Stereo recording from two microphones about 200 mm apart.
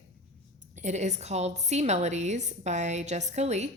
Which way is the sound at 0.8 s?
35° right (ahead or behind).